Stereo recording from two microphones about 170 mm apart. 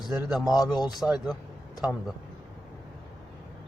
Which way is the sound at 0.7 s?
25° left (ahead or behind).